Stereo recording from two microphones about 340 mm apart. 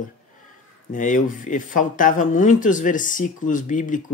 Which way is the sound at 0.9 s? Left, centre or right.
Left.